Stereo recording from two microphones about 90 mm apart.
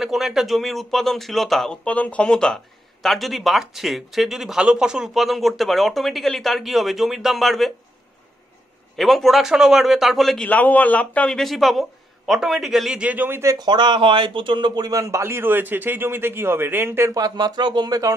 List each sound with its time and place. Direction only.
0.0 s speech: 5° right (ahead or behind)
1.9 s speech: 15° left (ahead or behind)
8.9 s speech: centre (ahead or behind)
10.5 s a man's voice: 20° left (ahead or behind); by 13.0 s 5° right (ahead or behind)
13.0 s a man's voice: 20° right (ahead or behind)
13.6 s speech: 55° right (ahead or behind)
14.9 s a man's voice: 40° right (ahead or behind)
17.1 s speech: 45° right (ahead or behind)